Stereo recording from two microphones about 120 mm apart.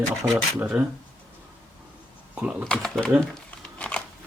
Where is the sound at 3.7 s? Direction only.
10° left (ahead or behind).